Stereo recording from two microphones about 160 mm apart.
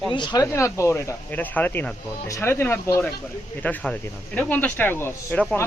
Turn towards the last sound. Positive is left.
turn(degrees=15)  # may be behind; listen again after turning